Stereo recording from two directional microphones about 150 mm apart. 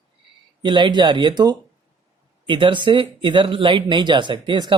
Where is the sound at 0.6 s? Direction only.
30° right (ahead or behind).